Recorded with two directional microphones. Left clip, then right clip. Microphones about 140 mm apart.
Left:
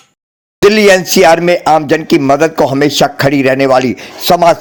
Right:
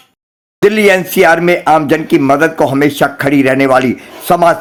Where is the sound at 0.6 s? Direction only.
45° left (ahead or behind).